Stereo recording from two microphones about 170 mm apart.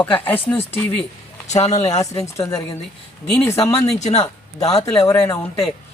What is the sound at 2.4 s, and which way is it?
Speech, 20° left (ahead or behind).